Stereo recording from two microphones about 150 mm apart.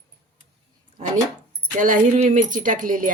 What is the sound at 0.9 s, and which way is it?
Speech, 55° right (ahead or behind).